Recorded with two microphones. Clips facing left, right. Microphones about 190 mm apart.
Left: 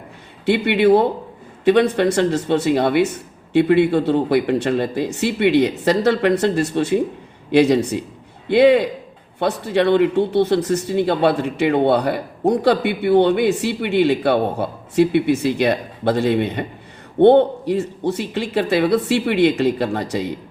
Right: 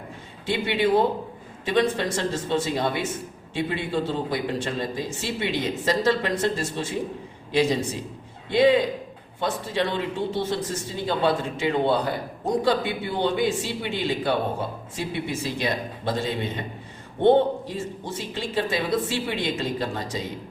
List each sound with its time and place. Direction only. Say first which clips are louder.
0.4 s a man's voice: left 8 dB; 65° left (ahead or behind)